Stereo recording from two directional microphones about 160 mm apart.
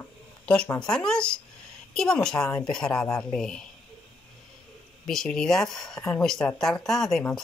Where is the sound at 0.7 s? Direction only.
5° left (ahead or behind).